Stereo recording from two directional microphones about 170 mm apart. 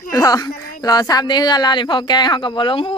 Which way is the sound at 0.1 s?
20° left (ahead or behind).